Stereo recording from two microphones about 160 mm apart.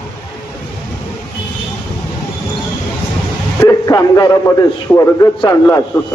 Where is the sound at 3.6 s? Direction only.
20° left (ahead or behind).